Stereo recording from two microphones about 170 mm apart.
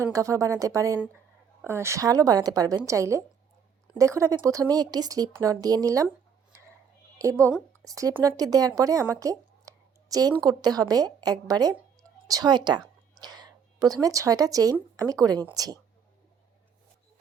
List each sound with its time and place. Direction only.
0.0 s speech: 20° right (ahead or behind)
7.2 s a woman's voice: 20° right (ahead or behind)